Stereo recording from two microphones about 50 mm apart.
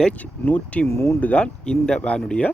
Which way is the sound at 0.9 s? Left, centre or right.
Left.